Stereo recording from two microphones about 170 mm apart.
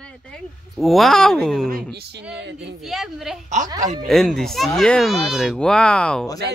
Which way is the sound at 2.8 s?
Centre (ahead or behind).